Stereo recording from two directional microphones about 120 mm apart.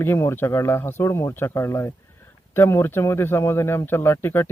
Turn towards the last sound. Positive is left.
turn(degrees=20)  # may be behind; listen again after turning